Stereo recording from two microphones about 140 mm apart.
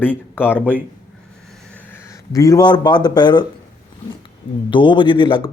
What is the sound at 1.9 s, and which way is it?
Speech, 25° left (ahead or behind).